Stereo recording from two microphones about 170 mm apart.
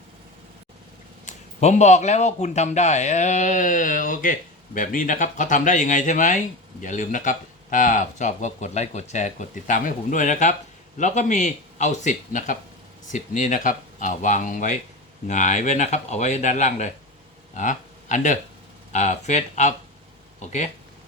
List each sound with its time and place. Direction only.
1.2 s speech: 45° left (ahead or behind)